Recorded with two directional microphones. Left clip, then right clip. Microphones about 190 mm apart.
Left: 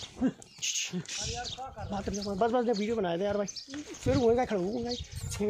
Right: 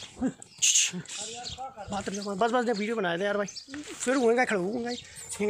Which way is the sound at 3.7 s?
60° left (ahead or behind).